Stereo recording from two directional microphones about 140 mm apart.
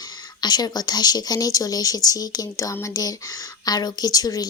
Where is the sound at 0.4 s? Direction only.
30° left (ahead or behind).